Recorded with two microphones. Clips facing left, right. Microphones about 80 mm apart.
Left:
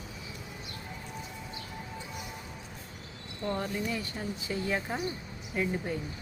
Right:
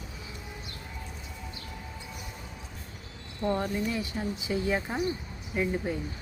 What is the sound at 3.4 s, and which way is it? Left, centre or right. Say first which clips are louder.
Speech: right 4 dB; centre.